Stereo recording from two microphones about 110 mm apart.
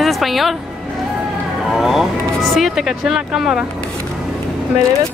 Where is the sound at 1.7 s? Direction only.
Centre (ahead or behind).